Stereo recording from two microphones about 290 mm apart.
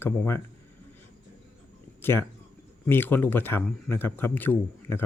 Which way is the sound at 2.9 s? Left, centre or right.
Centre.